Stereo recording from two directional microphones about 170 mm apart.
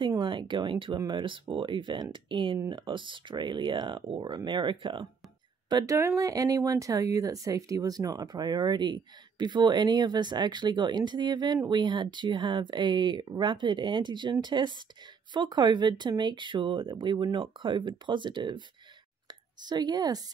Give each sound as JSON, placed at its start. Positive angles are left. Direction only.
{"t": 0.0, "sound": "speech", "side_deg": -25}
{"t": 19.6, "sound": "speech", "side_deg": -25}